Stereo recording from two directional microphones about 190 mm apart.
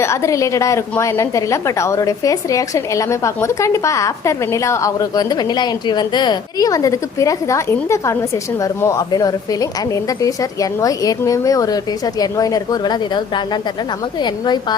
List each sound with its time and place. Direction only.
0.0 s a woman's voice: 15° left (ahead or behind)